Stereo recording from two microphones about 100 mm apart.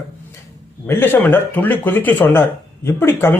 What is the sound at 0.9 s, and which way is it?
A man's voice, 20° left (ahead or behind).